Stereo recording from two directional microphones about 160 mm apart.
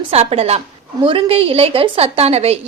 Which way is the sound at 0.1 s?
40° right (ahead or behind).